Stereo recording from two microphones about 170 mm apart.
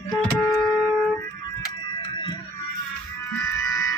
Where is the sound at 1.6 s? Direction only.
30° left (ahead or behind).